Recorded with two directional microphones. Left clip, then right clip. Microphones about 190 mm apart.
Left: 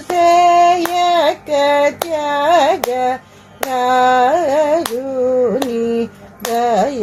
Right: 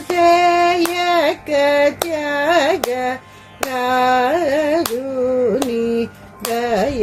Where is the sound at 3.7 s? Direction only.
20° right (ahead or behind).